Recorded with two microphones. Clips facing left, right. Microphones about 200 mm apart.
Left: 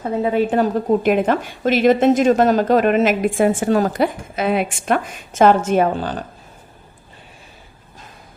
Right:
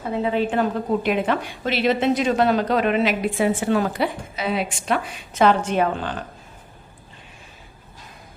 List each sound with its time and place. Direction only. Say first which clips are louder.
0.2 s a woman's voice: left 4 dB; 45° left (ahead or behind)